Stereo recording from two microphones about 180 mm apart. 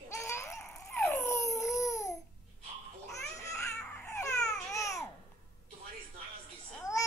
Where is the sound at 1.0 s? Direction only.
15° left (ahead or behind).